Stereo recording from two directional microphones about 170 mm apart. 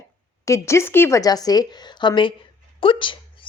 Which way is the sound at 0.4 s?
15° left (ahead or behind).